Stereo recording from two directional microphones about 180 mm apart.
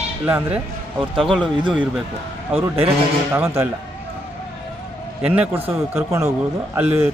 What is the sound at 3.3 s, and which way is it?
Speech, 10° right (ahead or behind).